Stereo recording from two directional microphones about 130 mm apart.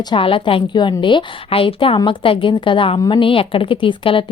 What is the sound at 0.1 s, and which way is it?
Speech, 40° left (ahead or behind).